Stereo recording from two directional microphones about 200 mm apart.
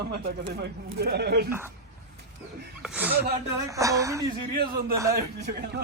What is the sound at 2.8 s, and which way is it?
A woman's voice, 5° right (ahead or behind).